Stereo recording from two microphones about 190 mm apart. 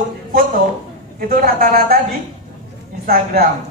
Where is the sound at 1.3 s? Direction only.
50° right (ahead or behind).